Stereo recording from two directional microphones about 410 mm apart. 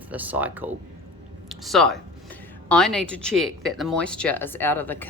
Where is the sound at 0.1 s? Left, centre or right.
Centre.